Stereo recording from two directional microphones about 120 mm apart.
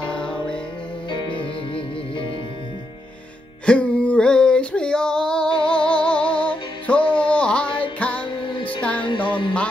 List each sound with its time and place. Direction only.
0.0 s music: 10° left (ahead or behind)
1.1 s music: 40° left (ahead or behind)
3.6 s a sound: 10° left (ahead or behind)
5.5 s humming: 40° left (ahead or behind)
5.9 s music: 10° left (ahead or behind)
7.2 s carnatic music: 10° left (ahead or behind)
8.0 s music: 10° left (ahead or behind)
8.3 s music: 45° left (ahead or behind)